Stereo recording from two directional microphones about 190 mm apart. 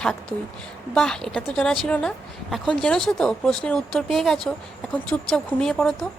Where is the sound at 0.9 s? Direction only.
5° left (ahead or behind).